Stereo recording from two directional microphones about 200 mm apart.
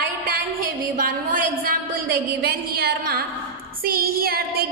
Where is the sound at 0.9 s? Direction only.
45° right (ahead or behind).